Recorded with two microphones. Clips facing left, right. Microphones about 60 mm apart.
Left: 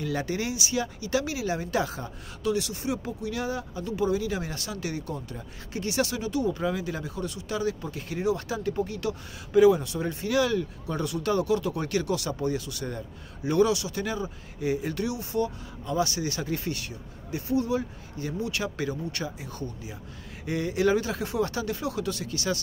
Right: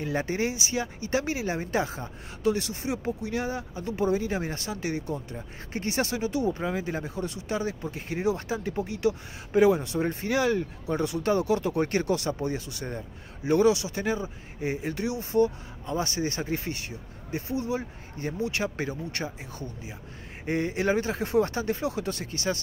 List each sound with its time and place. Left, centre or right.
0.0 s speech: right